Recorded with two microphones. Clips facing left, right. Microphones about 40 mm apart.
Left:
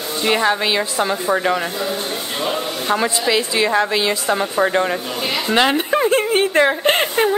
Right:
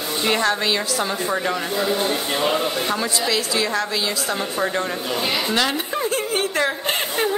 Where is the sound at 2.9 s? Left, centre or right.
Left.